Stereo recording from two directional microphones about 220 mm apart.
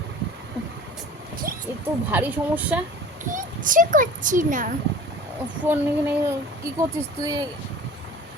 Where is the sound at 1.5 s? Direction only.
40° right (ahead or behind).